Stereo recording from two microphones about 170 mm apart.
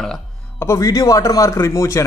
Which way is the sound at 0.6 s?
15° left (ahead or behind).